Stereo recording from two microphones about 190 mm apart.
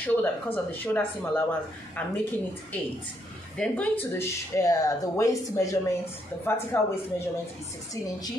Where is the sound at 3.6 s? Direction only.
10° left (ahead or behind).